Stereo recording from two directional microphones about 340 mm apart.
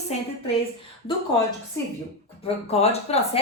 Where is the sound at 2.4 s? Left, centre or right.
Centre.